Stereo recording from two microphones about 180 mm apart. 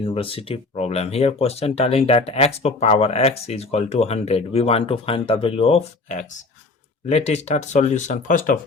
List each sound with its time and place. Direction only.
0.0 s speech: 30° left (ahead or behind); by 8.5 s 45° left (ahead or behind)